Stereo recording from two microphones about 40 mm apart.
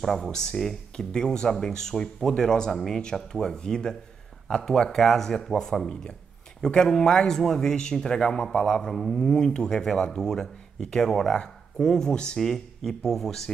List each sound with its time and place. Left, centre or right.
0.0 s speech: centre
0.9 s speech: left
5.9 s speech: left
12.4 s speech: centre